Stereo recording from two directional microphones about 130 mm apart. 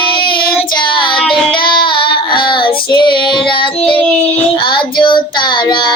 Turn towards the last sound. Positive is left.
turn(degrees=35)  # may be behind; listen again after turning